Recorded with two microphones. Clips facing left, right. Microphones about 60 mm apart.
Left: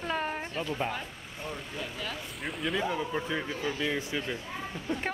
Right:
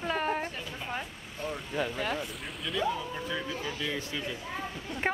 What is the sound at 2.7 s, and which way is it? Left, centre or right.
Speech, left.